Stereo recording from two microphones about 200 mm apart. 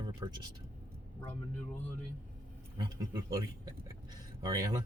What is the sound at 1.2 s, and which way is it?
Speech, 10° left (ahead or behind).